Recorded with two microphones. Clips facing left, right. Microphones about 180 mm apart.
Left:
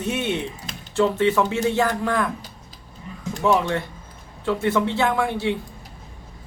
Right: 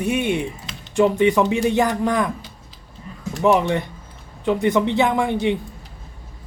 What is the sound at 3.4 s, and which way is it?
Speech, 20° right (ahead or behind).